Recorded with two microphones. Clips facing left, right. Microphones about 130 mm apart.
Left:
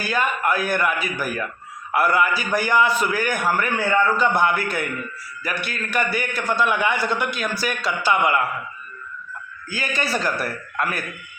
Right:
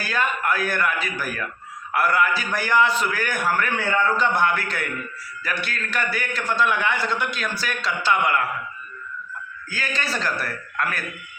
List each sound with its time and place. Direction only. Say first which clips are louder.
0.0 s a man's voice: left 2 dB; 10° left (ahead or behind)
9.6 s a man's voice: left 3 dB; 15° left (ahead or behind)